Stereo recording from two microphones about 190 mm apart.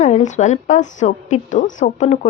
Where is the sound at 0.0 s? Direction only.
40° left (ahead or behind).